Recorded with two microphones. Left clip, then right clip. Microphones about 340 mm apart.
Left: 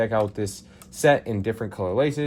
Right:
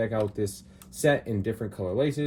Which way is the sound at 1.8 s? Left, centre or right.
Centre.